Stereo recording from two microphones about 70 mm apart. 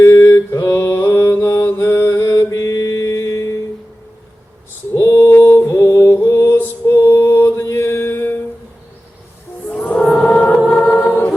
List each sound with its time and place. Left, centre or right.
0.0 s mantra: left
4.9 s mantra: left
5.6 s music: left
6.1 s music: left
7.6 s mantra: left
9.8 s music: centre